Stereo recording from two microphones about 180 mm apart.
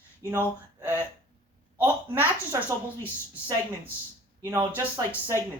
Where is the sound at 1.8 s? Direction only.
15° right (ahead or behind).